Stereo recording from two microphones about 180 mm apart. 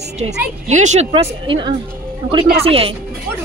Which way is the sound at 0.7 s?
40° right (ahead or behind).